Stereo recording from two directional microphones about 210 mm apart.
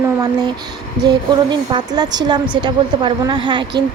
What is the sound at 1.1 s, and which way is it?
Speech, 20° right (ahead or behind).